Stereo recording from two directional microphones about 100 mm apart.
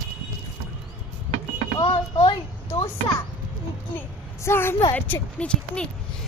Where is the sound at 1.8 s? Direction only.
60° left (ahead or behind).